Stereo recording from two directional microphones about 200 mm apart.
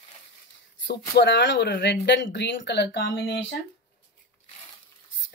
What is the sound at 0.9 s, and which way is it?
Speech, 60° left (ahead or behind).